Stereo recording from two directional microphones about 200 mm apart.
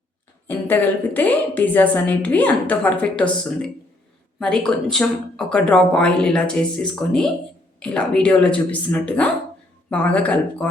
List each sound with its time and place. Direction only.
0.4 s a woman's voice: 10° left (ahead or behind)